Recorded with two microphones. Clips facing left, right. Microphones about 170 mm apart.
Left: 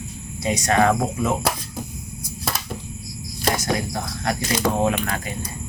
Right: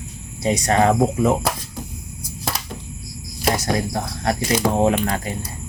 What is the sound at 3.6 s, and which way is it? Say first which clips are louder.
Speech: right 2 dB; 30° right (ahead or behind).